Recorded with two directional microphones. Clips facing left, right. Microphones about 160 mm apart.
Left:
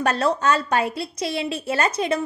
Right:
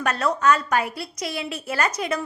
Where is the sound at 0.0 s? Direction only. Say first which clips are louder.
Left 1 dB; 30° left (ahead or behind).